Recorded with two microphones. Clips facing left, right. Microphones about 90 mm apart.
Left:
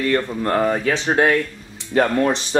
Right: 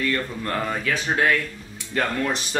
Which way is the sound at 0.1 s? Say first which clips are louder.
Left 7 dB; 35° left (ahead or behind).